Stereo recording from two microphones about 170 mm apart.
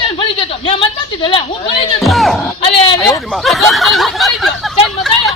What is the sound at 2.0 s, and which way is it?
Speech, centre (ahead or behind).